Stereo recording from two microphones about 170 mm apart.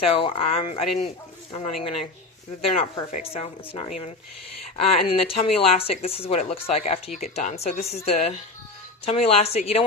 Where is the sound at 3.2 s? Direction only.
35° left (ahead or behind).